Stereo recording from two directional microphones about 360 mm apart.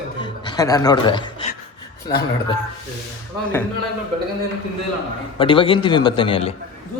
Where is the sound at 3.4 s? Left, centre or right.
Centre.